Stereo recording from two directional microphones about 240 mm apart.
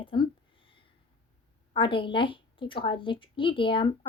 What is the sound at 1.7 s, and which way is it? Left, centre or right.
A woman's voice, left.